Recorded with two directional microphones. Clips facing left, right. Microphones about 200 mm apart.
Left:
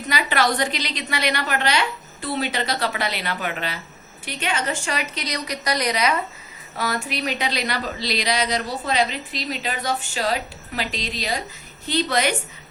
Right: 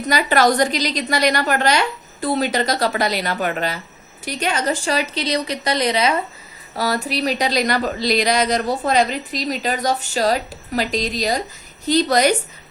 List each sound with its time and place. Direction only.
0.1 s a woman's voice: 45° right (ahead or behind)